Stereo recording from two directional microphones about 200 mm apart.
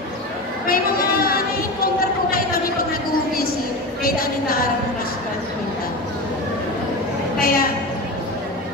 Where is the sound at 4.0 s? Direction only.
45° left (ahead or behind).